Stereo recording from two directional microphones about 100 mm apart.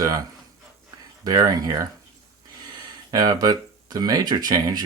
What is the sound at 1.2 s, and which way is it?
Speech, 40° right (ahead or behind).